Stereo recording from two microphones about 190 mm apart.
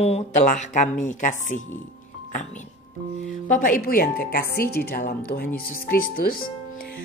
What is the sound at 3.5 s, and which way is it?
Speech, 45° left (ahead or behind).